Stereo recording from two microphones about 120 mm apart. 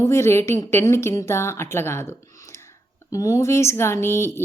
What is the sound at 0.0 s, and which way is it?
Speech, 20° left (ahead or behind).